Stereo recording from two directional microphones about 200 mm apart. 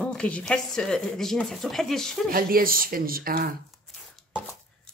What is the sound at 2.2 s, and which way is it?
Speech, 45° right (ahead or behind).